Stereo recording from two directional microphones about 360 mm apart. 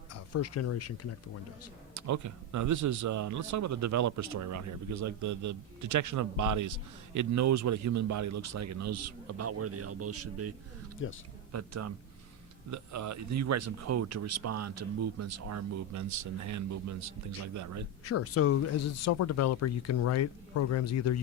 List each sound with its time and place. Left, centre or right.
0.1 s speech: left
2.0 s speech: right
11.0 s speech: left
11.5 s speech: right
18.0 s speech: left